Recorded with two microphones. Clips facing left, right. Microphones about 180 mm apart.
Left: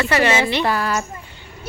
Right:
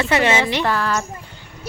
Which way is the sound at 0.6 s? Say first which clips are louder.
Even; 10° left (ahead or behind).